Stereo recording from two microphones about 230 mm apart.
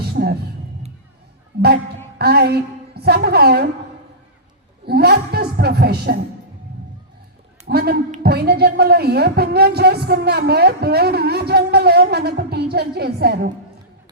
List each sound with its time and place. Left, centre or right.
0.0 s music: right
1.5 s a woman's voice: right
4.9 s a woman's voice: right
7.7 s a woman's voice: right